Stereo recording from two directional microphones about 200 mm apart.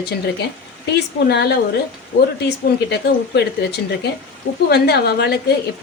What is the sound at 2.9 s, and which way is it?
Speech, 55° left (ahead or behind).